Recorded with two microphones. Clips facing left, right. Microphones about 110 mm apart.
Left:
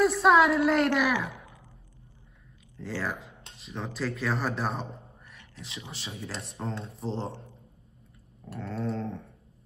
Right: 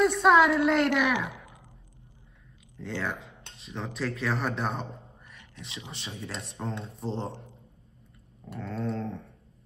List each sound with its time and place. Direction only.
0.0 s speech: centre (ahead or behind)
1.1 s a sound: 20° right (ahead or behind)
3.0 s speech: centre (ahead or behind)
8.5 s speech: centre (ahead or behind)